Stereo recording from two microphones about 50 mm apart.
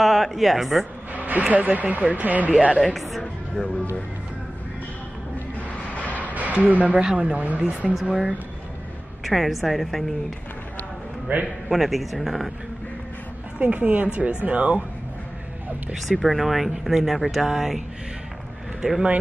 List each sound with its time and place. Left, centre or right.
0.0 s a woman's voice: centre
1.1 s a sound: right
1.5 s speech: right
2.5 s speech: centre
2.8 s speech: centre
6.2 s a sound: right
6.5 s speech: right
7.9 s speech: centre
9.2 s speech: centre
11.3 s speech: right
11.7 s speech: centre
13.6 s speech: right
15.9 s speech: centre
18.8 s speech: centre